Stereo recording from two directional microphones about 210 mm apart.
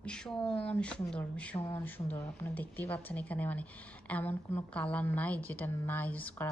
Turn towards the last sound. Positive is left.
turn(degrees=5)  # may be behind; listen again after turning